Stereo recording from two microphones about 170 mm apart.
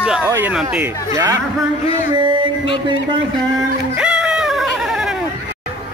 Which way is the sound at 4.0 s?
5° right (ahead or behind).